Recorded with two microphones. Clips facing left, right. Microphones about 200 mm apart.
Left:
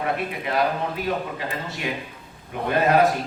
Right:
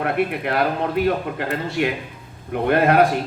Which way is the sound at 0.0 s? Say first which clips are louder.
Right 5 dB; 60° right (ahead or behind).